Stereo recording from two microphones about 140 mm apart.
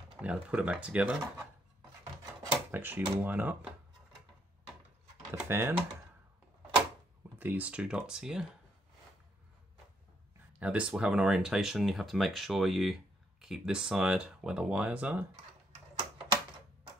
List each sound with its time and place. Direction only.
0.2 s speech: 10° right (ahead or behind)
2.5 s speech: 15° right (ahead or behind)
5.3 s speech: 15° right (ahead or behind)
7.3 s speech: 10° right (ahead or behind)
10.6 s speech: 10° right (ahead or behind)